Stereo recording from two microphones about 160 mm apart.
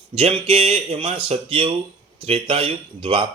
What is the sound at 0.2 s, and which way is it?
A man's voice, 35° right (ahead or behind).